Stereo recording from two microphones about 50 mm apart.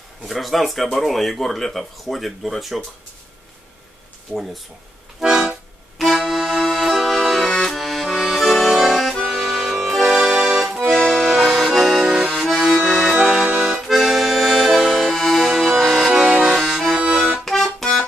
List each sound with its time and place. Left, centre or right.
0.3 s speech: centre
4.3 s speech: centre
5.2 s accordion: centre
13.5 s accordion: centre
13.7 s accordion: centre
17.1 s accordion: centre
17.5 s music: centre